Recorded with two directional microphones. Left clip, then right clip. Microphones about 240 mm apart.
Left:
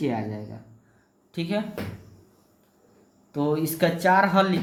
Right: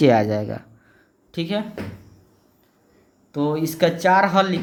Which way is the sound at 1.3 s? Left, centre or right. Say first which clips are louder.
Right 3 dB; right.